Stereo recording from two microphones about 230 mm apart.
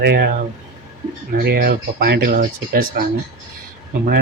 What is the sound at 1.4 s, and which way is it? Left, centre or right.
Speech, right.